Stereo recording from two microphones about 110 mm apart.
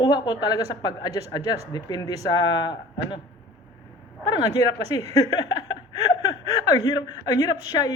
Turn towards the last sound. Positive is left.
turn(degrees=40)  # may be behind; listen again after turning